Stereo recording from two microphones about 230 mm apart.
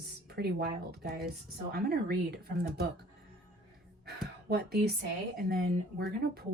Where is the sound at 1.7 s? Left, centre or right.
Right.